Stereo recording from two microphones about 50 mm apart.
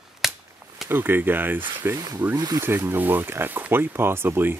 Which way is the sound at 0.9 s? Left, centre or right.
Right.